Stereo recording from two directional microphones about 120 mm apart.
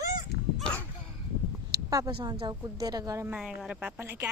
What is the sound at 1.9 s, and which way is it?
A woman's voice, 30° right (ahead or behind).